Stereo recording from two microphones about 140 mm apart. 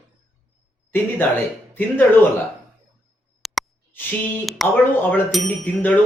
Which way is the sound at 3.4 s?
Centre (ahead or behind).